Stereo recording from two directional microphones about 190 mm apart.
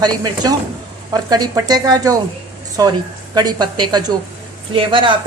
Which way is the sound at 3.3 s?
20° right (ahead or behind).